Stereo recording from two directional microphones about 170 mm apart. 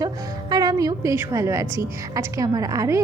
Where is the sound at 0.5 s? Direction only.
20° right (ahead or behind).